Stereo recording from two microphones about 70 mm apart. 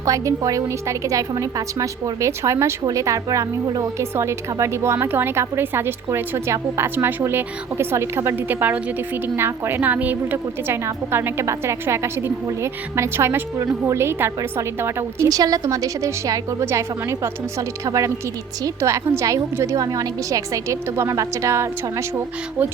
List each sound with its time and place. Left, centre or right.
0.0 s a woman's voice: right
15.3 s a woman's voice: right